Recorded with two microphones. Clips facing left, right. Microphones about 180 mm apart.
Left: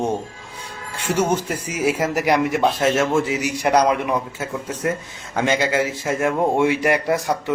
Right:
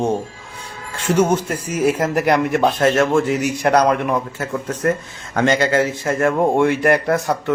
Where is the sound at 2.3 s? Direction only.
5° left (ahead or behind).